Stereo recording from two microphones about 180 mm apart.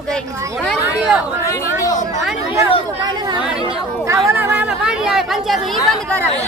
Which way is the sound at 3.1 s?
25° right (ahead or behind).